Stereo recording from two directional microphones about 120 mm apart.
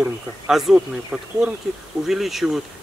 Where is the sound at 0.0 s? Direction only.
Centre (ahead or behind).